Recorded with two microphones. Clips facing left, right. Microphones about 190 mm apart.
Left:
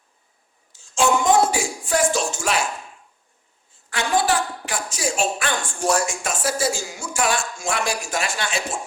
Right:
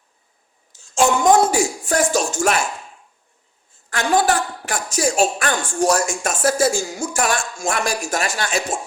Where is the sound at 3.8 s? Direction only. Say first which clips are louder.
Right 3 dB; 45° right (ahead or behind).